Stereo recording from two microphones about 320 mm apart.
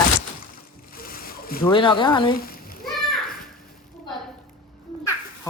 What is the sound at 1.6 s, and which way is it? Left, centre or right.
Speech, centre.